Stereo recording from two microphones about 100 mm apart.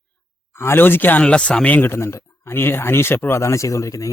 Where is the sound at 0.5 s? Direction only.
25° left (ahead or behind).